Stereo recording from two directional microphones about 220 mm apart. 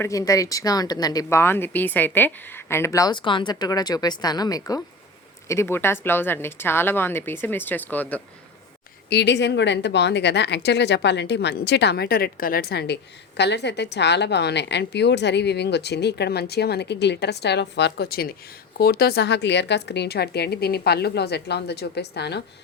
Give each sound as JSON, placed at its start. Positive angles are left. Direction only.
{"t": 0.0, "sound": "speech", "side_deg": 15}
{"t": 9.0, "sound": "speech", "side_deg": 50}